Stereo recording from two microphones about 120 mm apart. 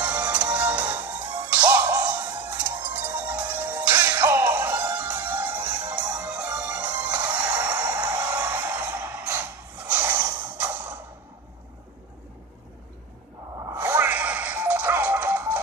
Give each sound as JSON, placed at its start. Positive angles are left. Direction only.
{"t": 0.0, "sound": "music", "side_deg": -10}
{"t": 1.0, "sound": "music", "side_deg": -35}
{"t": 1.5, "sound": "music", "side_deg": -15}
{"t": 13.6, "sound": "music", "side_deg": -25}